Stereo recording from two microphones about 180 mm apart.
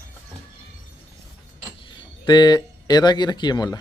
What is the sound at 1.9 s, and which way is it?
Speech, 25° left (ahead or behind).